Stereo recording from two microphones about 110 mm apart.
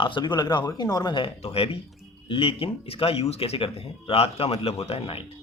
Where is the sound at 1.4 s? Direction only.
60° left (ahead or behind).